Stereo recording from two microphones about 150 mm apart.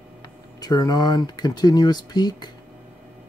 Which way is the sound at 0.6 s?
25° left (ahead or behind).